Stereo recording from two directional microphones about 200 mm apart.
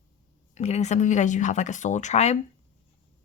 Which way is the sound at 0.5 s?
35° left (ahead or behind).